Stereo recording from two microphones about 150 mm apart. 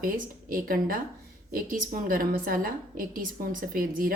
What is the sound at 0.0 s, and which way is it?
A woman's voice, 70° right (ahead or behind).